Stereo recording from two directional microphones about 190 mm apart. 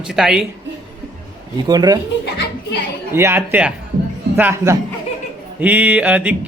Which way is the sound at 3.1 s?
10° right (ahead or behind).